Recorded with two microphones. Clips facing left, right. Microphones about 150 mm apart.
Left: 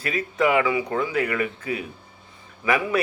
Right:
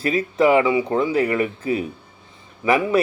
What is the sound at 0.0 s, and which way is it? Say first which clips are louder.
Speech: right 5 dB; 30° right (ahead or behind).